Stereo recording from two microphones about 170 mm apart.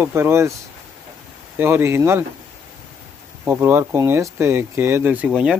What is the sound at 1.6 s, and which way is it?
Speech, 15° right (ahead or behind).